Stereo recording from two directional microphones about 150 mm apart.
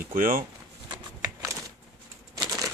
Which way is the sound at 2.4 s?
25° right (ahead or behind).